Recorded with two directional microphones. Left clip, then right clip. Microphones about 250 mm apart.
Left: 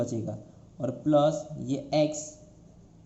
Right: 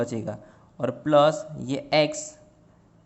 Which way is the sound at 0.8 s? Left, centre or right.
Right.